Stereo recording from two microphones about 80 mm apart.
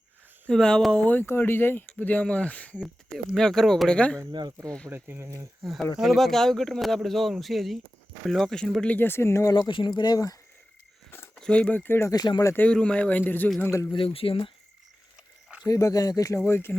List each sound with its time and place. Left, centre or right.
0.4 s speech: centre
3.1 s speech: centre
4.3 s speech: right
4.9 s speech: right
6.0 s speech: centre
9.0 s speech: left
9.6 s speech: left
11.3 s speech: centre; by 12.1 s left
12.1 s speech: left
12.5 s speech: centre
13.6 s speech: left
13.9 s speech: left
15.6 s speech: left
16.5 s speech: left